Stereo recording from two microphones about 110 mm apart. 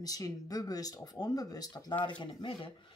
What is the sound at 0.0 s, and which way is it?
Speech, 35° left (ahead or behind).